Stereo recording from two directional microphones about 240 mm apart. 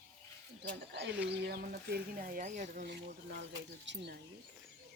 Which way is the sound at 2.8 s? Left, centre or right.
Right.